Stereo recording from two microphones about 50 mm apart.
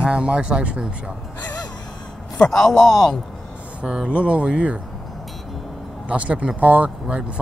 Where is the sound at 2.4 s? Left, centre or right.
Centre.